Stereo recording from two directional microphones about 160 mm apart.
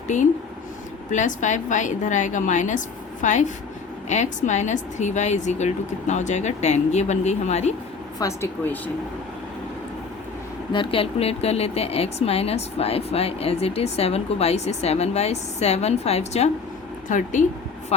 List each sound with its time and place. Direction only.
0.1 s speech: 50° left (ahead or behind)
8.2 s speech: 15° left (ahead or behind)
10.7 s a woman's voice: 35° left (ahead or behind)
17.1 s speech: 50° left (ahead or behind)